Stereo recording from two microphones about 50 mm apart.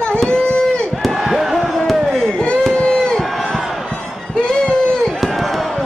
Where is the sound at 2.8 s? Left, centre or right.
Centre.